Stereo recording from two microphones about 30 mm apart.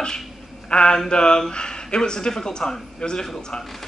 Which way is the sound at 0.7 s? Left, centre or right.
Left.